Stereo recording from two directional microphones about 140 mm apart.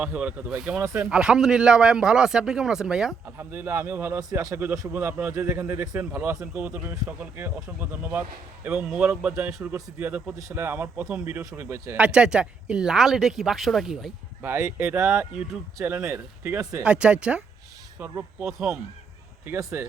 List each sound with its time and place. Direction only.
0.0 s speech: 10° right (ahead or behind)
3.3 s speech: 15° right (ahead or behind)
11.9 s speech: 5° right (ahead or behind)
14.4 s speech: 15° right (ahead or behind)
16.8 s speech: 10° right (ahead or behind)